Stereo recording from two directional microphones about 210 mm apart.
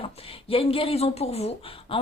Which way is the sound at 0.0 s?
25° left (ahead or behind).